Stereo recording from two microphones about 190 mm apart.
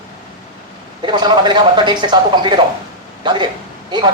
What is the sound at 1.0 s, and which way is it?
Speech, 25° right (ahead or behind).